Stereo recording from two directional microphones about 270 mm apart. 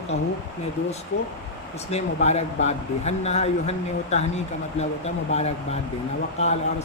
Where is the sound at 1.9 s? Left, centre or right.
Left.